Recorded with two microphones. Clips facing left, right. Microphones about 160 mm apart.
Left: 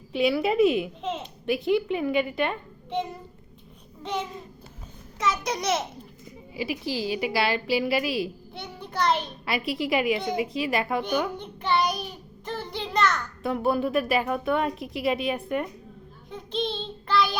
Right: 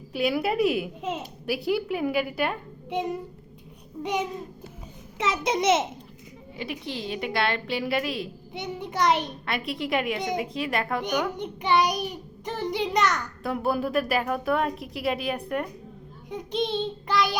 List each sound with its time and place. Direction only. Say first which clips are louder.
0.1 s a woman's voice: left 2 dB; 5° right (ahead or behind)
5.2 s a child's voice: right 3 dB; 25° right (ahead or behind)
6.6 s a woman's voice: left 4 dB; 5° left (ahead or behind)
8.5 s a child's voice: right 3 dB; 20° right (ahead or behind)
9.5 s a woman's voice: left 3 dB; centre (ahead or behind)
11.3 s a child's voice: right 2 dB; 15° right (ahead or behind)
13.4 s a woman's voice: left 2 dB; centre (ahead or behind)
16.3 s child singing: right 2 dB; 15° right (ahead or behind)